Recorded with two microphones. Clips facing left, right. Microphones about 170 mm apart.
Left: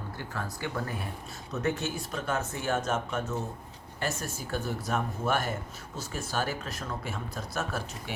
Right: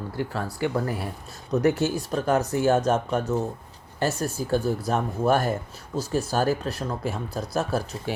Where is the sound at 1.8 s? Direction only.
35° right (ahead or behind).